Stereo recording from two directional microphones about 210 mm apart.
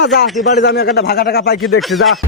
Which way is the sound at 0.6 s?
50° left (ahead or behind).